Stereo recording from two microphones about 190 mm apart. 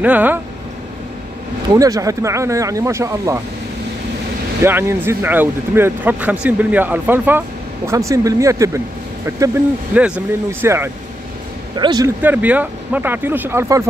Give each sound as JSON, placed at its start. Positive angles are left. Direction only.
{"t": 0.0, "sound": "speech", "side_deg": -10}
{"t": 1.7, "sound": "speech", "side_deg": -15}
{"t": 4.6, "sound": "speech", "side_deg": -10}
{"t": 9.9, "sound": "speech", "side_deg": -5}
{"t": 11.7, "sound": "a man's voice", "side_deg": -20}
{"t": 12.2, "sound": "speech", "side_deg": -10}